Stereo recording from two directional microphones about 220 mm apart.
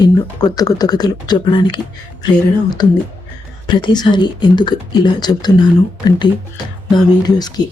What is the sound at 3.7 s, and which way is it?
Speech, 20° left (ahead or behind).